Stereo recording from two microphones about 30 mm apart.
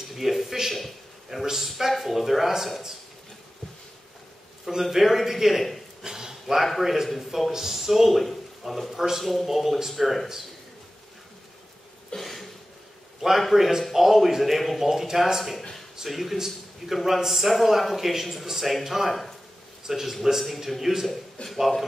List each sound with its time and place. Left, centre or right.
0.1 s a man's voice: centre
0.7 s a sound: centre
1.4 s a man's voice: centre
4.9 s a man's voice: centre
6.0 s a sound: centre
6.4 s a man's voice: centre
8.9 s a man's voice: centre
9.2 s a man's voice: centre
12.2 s a sound: centre
13.2 s a man's voice: centre